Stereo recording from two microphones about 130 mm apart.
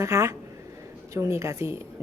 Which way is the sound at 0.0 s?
20° right (ahead or behind).